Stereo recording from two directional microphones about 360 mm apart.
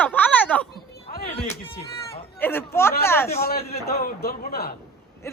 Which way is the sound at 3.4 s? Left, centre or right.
Left.